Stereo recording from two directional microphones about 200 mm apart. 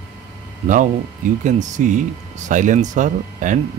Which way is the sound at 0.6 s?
40° right (ahead or behind).